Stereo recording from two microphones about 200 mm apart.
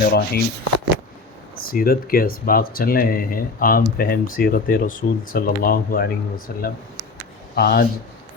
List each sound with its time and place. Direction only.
0.0 s speech: 55° left (ahead or behind)
1.6 s speech: 50° left (ahead or behind)